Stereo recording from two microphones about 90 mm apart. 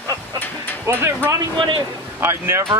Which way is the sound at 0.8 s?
30° right (ahead or behind).